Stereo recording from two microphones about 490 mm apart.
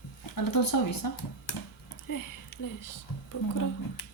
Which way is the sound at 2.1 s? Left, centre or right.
Left.